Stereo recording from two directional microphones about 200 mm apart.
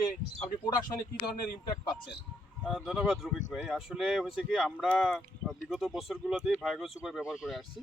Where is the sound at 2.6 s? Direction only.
5° right (ahead or behind).